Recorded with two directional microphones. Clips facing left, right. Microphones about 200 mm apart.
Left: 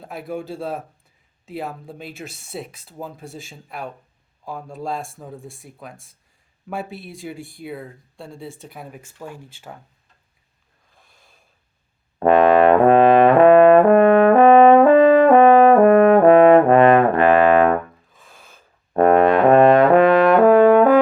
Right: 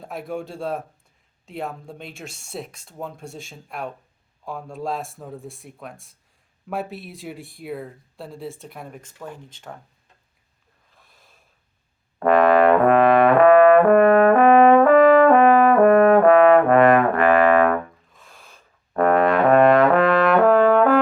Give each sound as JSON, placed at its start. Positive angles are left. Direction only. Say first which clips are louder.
{"t": 0.0, "sound": "speech", "louder": "left 1 dB", "side_deg": 0}
{"t": 11.0, "sound": "snort", "louder": "even", "side_deg": 0}
{"t": 12.2, "sound": "brass instrument", "louder": "left 2 dB", "side_deg": 20}
{"t": 18.1, "sound": "gasp", "louder": "left 1 dB", "side_deg": 0}
{"t": 18.9, "sound": "brass instrument", "louder": "left 4 dB", "side_deg": 25}